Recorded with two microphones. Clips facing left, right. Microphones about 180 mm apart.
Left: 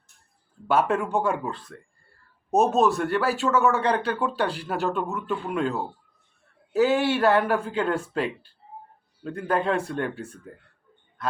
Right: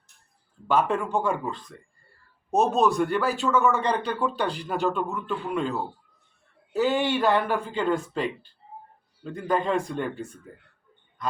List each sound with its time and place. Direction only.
0.7 s speech: 5° left (ahead or behind)
6.7 s speech: 5° left (ahead or behind)